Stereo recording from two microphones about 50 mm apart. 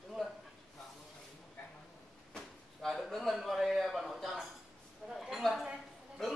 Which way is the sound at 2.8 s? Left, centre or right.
Centre.